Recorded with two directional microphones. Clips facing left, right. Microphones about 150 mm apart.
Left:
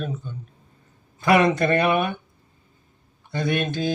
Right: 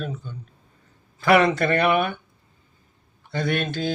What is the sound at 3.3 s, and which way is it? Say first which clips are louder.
Speech: left 1 dB; 15° left (ahead or behind).